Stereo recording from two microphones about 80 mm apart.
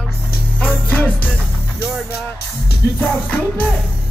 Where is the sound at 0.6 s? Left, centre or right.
Left.